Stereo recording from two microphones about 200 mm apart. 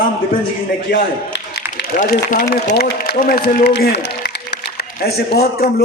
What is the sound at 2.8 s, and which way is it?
A man's voice, 55° left (ahead or behind).